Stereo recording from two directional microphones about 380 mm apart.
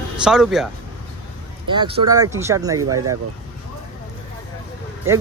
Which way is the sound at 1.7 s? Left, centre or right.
Centre.